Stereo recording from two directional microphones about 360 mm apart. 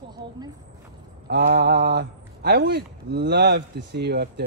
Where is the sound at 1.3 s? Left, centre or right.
Right.